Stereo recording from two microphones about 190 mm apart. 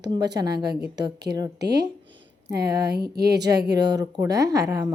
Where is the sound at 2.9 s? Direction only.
55° right (ahead or behind).